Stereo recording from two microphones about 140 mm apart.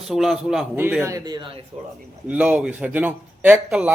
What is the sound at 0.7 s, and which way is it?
Speech, 15° right (ahead or behind).